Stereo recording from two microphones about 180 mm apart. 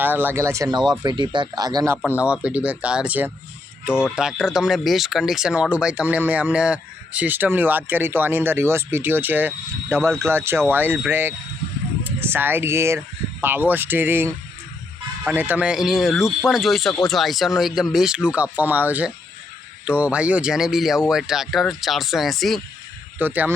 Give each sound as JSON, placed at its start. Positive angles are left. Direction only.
{"t": 0.0, "sound": "speech", "side_deg": -10}
{"t": 2.1, "sound": "speech", "side_deg": -5}
{"t": 23.1, "sound": "speech", "side_deg": -10}